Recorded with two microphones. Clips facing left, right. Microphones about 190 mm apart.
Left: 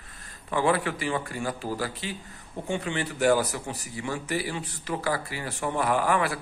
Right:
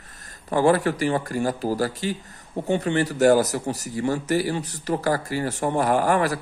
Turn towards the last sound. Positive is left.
turn(degrees=-40)  # may be behind; listen again after turning